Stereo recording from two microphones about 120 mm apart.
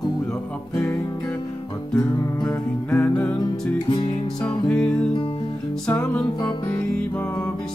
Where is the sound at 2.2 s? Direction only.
30° left (ahead or behind).